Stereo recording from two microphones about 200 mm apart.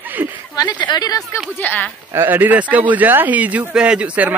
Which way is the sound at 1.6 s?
10° left (ahead or behind).